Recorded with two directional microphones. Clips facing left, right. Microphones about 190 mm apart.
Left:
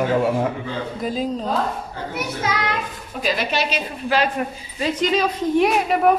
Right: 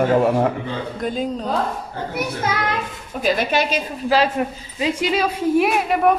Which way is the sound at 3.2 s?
50° right (ahead or behind).